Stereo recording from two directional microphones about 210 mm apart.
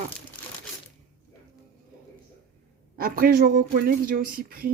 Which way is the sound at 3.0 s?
45° right (ahead or behind).